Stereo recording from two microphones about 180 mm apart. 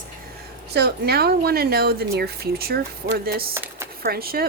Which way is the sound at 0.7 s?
65° right (ahead or behind).